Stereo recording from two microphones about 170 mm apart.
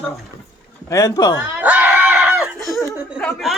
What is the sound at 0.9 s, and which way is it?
Speech, 20° left (ahead or behind).